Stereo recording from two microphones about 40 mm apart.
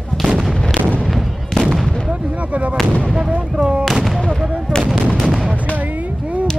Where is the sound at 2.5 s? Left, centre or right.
Right.